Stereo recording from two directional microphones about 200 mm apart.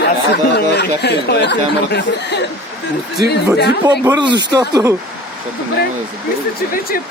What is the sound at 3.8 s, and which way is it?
Speech, 15° right (ahead or behind).